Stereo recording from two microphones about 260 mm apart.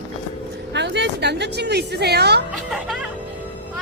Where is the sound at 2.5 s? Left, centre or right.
Centre.